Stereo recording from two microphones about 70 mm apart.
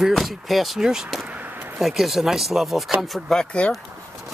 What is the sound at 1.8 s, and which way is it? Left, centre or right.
Speech, centre.